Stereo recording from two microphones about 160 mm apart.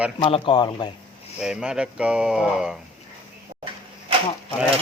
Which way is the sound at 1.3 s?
5° right (ahead or behind).